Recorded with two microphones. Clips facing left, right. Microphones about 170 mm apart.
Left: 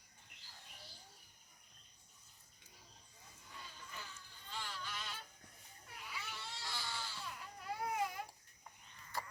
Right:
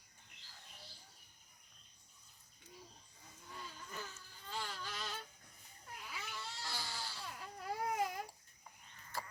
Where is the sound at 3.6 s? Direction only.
45° right (ahead or behind).